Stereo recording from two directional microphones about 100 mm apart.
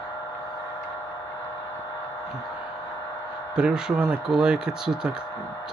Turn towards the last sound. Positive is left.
turn(degrees=-5)  # may be behind; listen again after turning